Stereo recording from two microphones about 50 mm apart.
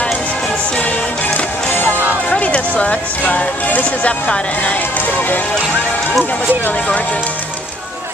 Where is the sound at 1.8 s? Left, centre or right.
Left.